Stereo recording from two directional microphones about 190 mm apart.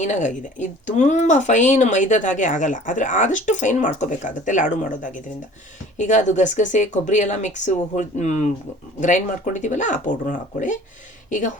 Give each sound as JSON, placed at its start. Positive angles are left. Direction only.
{"t": 0.0, "sound": "speech", "side_deg": 40}